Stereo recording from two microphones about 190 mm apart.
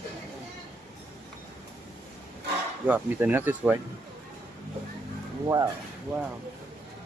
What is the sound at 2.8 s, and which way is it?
Speech, 10° right (ahead or behind).